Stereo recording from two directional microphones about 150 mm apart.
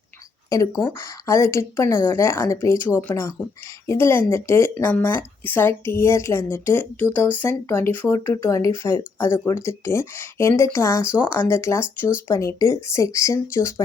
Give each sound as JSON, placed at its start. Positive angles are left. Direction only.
{"t": 0.5, "sound": "speech", "side_deg": 25}